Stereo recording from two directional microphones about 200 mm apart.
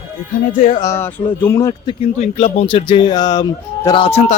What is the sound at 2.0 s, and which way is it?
Speech, 35° left (ahead or behind).